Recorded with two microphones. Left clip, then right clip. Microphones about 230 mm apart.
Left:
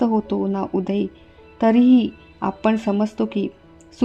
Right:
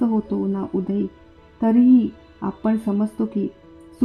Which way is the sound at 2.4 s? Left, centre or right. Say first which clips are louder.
Left 4 dB; left.